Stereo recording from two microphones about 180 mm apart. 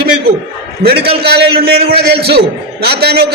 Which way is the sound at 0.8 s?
60° right (ahead or behind).